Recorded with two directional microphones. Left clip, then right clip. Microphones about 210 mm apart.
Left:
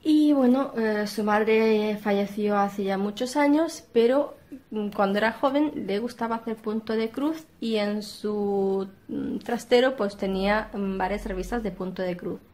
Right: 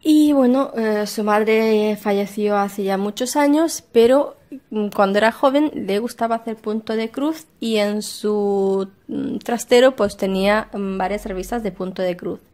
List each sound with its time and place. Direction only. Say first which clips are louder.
0.0 s a woman's voice: right 6 dB; 45° right (ahead or behind)